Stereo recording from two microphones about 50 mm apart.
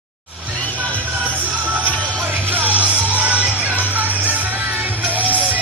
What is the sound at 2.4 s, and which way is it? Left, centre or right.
Music, right.